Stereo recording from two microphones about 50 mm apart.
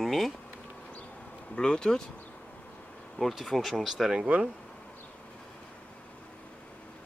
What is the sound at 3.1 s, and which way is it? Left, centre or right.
Speech, centre.